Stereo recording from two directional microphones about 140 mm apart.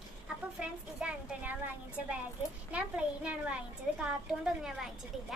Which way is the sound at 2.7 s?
10° right (ahead or behind).